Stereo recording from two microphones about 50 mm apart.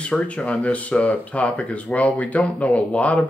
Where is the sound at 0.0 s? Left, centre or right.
Left.